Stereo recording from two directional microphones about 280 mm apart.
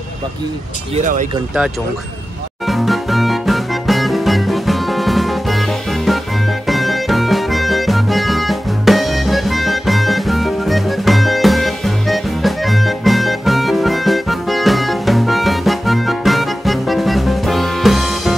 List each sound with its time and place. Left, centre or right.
0.9 s speech: right
2.6 s music: centre